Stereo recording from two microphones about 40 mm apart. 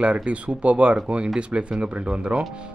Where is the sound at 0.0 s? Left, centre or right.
Right.